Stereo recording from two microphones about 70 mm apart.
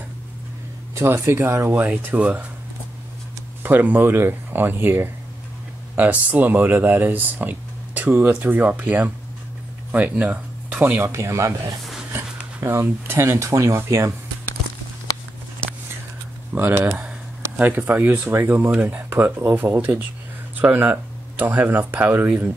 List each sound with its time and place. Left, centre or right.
0.9 s speech: right
3.6 s speech: right
11.1 s speech: right
12.5 s speech: right
16.5 s speech: right